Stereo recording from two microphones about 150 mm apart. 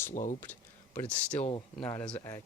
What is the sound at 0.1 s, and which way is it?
Speech, 55° left (ahead or behind).